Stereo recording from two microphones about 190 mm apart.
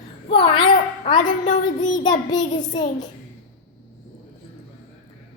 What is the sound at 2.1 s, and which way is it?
Child singing, 20° left (ahead or behind).